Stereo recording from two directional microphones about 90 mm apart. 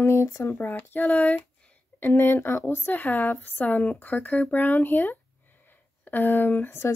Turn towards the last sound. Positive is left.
turn(degrees=30)  # may be behind; listen again after turning